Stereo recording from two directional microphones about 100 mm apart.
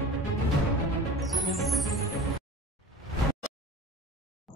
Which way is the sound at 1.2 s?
Centre (ahead or behind).